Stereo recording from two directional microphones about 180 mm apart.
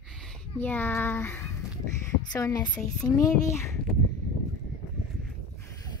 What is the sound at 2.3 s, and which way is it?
Music, 20° left (ahead or behind).